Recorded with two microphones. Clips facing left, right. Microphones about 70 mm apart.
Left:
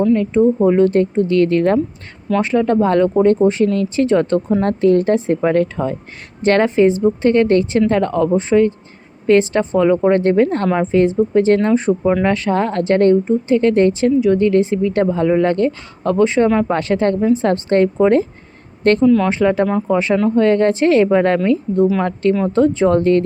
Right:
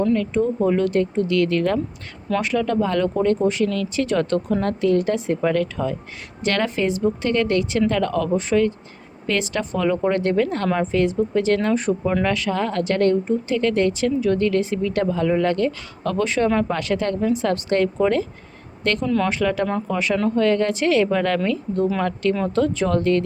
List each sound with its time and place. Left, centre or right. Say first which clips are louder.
0.1 s speech: left 7 dB; left
14.2 s speech: left 6 dB; left
19.0 s speech: left 8 dB; centre
19.3 s speech: left 6 dB; left